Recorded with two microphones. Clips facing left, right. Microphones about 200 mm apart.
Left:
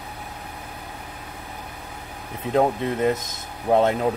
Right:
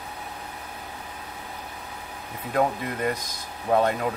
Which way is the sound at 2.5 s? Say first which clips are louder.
Left 4 dB; 25° left (ahead or behind).